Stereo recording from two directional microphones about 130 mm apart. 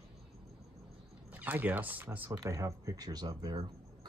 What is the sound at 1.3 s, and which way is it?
Speech, 15° right (ahead or behind).